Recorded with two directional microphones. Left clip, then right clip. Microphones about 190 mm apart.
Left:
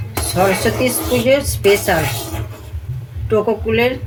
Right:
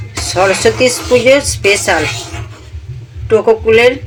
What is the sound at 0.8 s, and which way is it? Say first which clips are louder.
A woman's voice: right 8 dB; 35° right (ahead or behind).